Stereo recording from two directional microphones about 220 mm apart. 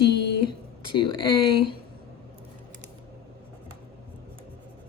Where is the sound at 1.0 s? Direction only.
45° right (ahead or behind).